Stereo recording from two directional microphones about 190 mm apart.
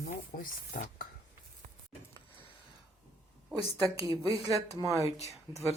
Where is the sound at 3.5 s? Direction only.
15° right (ahead or behind).